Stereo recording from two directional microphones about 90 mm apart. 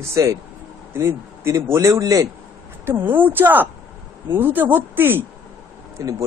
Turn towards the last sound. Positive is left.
turn(degrees=-40)  # may be behind; listen again after turning